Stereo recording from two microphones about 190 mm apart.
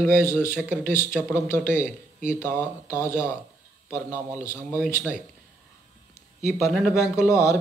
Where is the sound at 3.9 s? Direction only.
10° right (ahead or behind).